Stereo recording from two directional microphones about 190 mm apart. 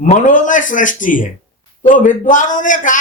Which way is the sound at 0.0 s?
40° left (ahead or behind).